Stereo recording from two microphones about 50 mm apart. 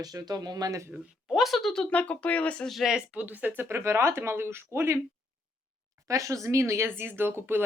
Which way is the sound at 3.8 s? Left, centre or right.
Right.